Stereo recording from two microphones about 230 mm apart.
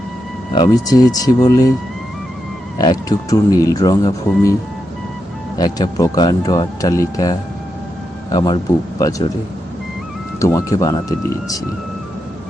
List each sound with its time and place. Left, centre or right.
0.5 s speech: centre
2.7 s speech: centre
5.5 s speech: centre
10.4 s speech: centre